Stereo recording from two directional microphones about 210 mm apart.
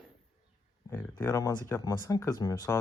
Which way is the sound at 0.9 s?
10° left (ahead or behind).